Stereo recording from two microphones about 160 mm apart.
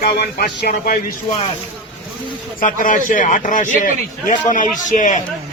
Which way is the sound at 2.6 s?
55° left (ahead or behind).